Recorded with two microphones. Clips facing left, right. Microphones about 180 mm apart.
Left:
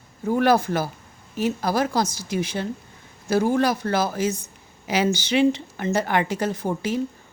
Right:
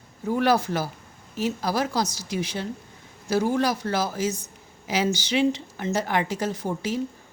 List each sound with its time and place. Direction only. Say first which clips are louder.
0.3 s a woman's voice: left 3 dB; 50° left (ahead or behind)